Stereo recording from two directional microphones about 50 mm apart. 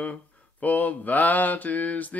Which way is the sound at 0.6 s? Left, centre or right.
Left.